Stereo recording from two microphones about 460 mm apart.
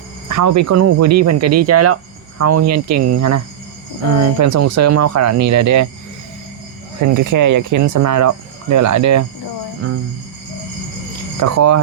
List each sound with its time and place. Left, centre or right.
0.3 s speech: right
7.1 s speech: right
11.3 s speech: right